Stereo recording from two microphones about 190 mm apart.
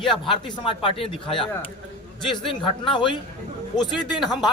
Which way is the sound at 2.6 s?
25° left (ahead or behind).